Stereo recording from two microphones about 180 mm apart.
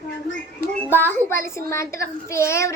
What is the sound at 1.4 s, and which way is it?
A child's voice, 15° left (ahead or behind).